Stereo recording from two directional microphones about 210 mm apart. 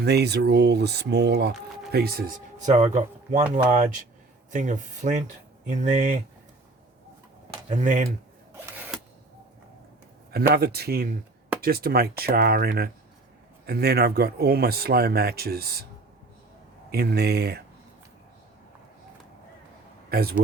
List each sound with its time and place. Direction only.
0.0 s speech: 50° right (ahead or behind); by 3.4 s 30° right (ahead or behind)
4.5 s speech: 35° right (ahead or behind)
7.7 s speech: 35° right (ahead or behind)
8.5 s camera: 5° right (ahead or behind)
10.3 s speech: 50° right (ahead or behind)
16.9 s speech: 50° right (ahead or behind)
20.1 s speech: 45° right (ahead or behind)